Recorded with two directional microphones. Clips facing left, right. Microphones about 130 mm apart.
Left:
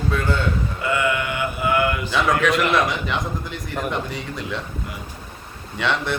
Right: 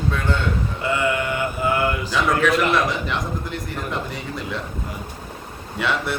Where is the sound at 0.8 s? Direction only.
30° right (ahead or behind).